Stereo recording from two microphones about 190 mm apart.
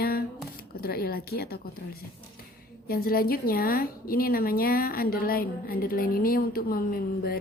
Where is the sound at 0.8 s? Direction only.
50° left (ahead or behind).